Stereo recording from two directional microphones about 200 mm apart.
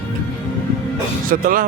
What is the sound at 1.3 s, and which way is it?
Speech, 45° right (ahead or behind).